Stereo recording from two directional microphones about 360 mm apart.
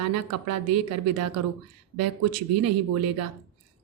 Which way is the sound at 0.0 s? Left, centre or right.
Right.